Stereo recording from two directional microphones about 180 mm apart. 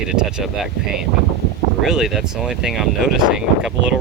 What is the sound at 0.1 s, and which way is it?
Speech, 5° right (ahead or behind).